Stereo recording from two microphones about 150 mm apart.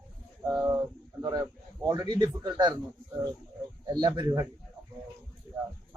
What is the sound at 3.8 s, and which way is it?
Speech, 30° right (ahead or behind).